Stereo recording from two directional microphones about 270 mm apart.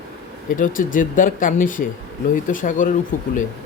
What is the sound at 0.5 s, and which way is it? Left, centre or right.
Speech, left.